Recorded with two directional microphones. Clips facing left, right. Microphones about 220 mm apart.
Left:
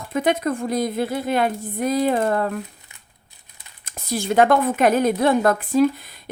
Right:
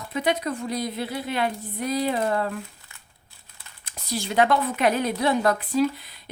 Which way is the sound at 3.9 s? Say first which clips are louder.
Left 6 dB; 50° left (ahead or behind).